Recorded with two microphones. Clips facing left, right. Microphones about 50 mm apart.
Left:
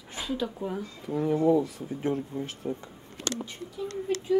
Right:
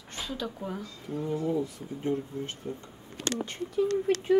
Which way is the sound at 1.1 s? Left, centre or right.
Left.